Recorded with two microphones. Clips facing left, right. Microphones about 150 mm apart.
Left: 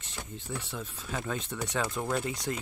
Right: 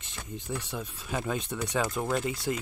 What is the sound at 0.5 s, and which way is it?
Speech, 15° right (ahead or behind).